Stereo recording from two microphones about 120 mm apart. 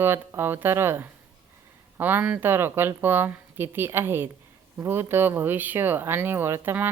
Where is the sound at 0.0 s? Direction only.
20° right (ahead or behind).